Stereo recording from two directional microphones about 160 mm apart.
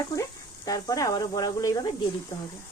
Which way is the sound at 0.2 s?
20° left (ahead or behind).